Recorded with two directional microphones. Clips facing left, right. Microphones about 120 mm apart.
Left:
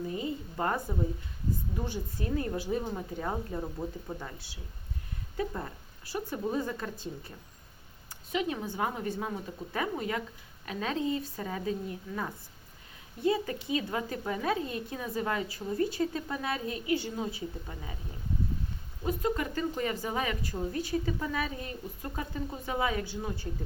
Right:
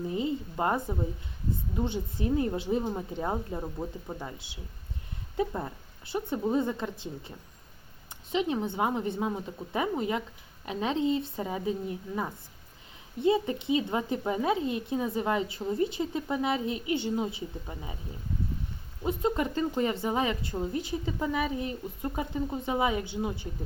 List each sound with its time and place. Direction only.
0.1 s a woman's voice: 25° right (ahead or behind)
6.1 s speech: 20° right (ahead or behind)
19.0 s speech: 25° right (ahead or behind)